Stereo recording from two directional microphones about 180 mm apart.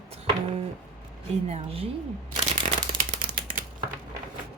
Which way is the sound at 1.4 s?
35° right (ahead or behind).